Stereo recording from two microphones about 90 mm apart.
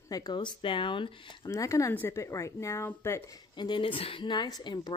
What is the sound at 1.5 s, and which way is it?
Speech, 35° left (ahead or behind).